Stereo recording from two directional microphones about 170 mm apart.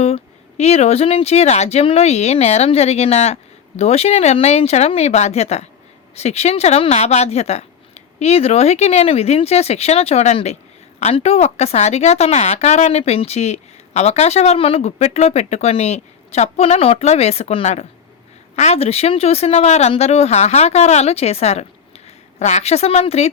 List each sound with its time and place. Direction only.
0.0 s speech: 40° left (ahead or behind)